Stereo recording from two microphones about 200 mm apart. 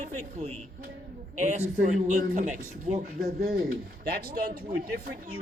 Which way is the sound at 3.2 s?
50° right (ahead or behind).